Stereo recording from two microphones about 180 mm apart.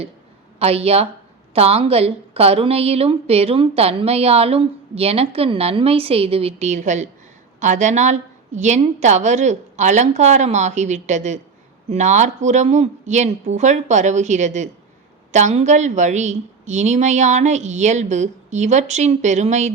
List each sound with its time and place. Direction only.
0.6 s a woman's voice: 35° right (ahead or behind)